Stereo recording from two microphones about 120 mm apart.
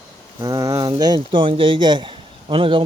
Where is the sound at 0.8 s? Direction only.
35° right (ahead or behind).